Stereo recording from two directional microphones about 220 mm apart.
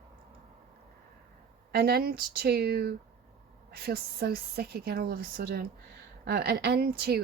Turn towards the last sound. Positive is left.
turn(degrees=-45)  # may be behind; listen again after turning